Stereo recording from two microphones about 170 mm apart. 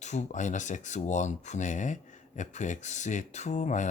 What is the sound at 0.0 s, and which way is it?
Speech, 45° left (ahead or behind).